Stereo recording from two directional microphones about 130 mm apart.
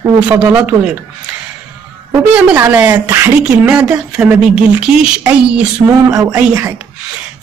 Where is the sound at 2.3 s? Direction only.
15° right (ahead or behind).